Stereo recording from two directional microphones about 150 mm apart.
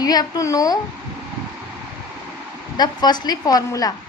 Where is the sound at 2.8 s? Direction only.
30° left (ahead or behind).